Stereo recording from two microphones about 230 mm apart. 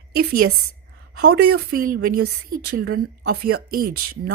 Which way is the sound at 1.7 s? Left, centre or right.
Right.